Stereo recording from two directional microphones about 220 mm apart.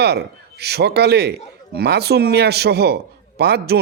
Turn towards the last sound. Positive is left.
turn(degrees=-45)  # may be behind; listen again after turning